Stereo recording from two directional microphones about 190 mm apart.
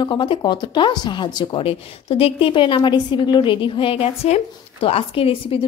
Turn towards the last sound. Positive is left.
turn(degrees=30)  # may be behind; listen again after turning